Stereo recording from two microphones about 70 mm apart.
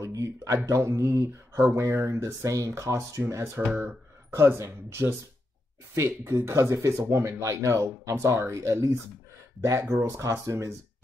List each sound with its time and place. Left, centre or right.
0.0 s speech: right
1.8 s speech: right